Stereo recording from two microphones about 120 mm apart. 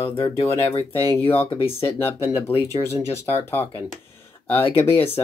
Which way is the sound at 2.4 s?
60° left (ahead or behind).